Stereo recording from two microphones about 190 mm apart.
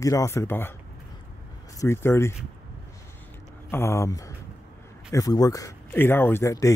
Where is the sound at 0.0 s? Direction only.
15° left (ahead or behind).